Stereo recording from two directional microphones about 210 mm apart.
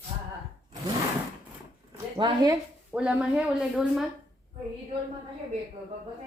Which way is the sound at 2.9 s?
5° right (ahead or behind).